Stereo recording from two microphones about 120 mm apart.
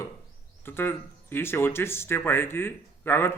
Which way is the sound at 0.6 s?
20° left (ahead or behind).